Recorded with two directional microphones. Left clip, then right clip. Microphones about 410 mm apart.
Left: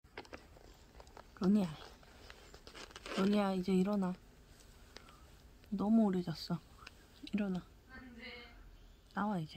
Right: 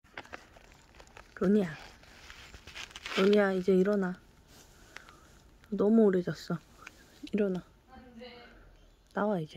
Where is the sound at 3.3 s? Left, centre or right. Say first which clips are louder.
Right 9 dB; centre.